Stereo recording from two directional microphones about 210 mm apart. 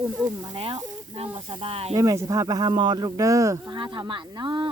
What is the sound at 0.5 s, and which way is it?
Speech, 25° right (ahead or behind).